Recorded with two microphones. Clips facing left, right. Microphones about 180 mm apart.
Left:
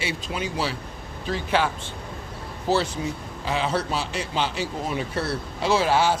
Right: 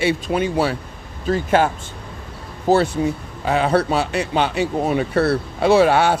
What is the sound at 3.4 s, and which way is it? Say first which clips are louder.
A man's voice: right 8 dB; 60° right (ahead or behind).